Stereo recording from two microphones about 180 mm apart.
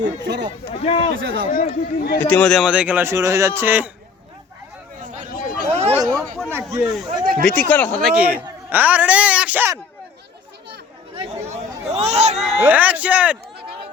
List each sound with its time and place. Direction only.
0.0 s speech: 75° right (ahead or behind)
0.7 s speech: 35° left (ahead or behind)
1.2 s speech: 80° right
1.5 s speech: 50° left (ahead or behind)
2.2 s speech: 5° left (ahead or behind); by 3.9 s 10° right (ahead or behind)
4.9 s a sound: 45° right (ahead or behind)
6.1 s a sound: centre (ahead or behind)
6.5 s speech: 10° right (ahead or behind); by 8.1 s 5° left (ahead or behind)
8.1 s speech: 10° right (ahead or behind)
11.2 s chatter: 40° right (ahead or behind)
12.4 s speech: 5° right (ahead or behind)